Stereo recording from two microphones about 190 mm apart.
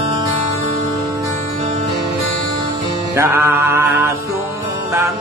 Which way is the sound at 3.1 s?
15° right (ahead or behind).